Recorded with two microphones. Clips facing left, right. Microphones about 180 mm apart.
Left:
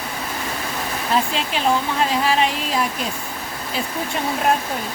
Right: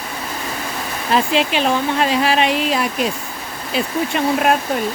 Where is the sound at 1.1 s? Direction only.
75° right (ahead or behind).